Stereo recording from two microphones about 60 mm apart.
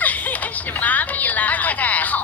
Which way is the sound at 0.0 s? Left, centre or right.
Left.